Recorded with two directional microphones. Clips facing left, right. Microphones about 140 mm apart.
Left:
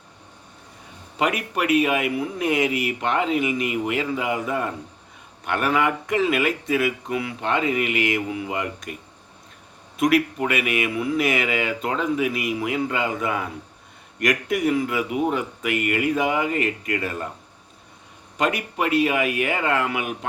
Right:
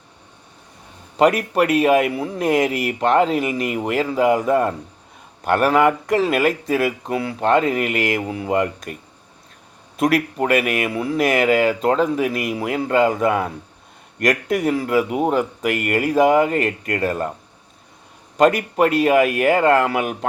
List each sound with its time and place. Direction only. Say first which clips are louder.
1.1 s speech: right 8 dB; 40° right (ahead or behind)
10.0 s speech: right 1 dB; 40° right (ahead or behind)
18.3 s a man's voice: right 8 dB; 45° right (ahead or behind)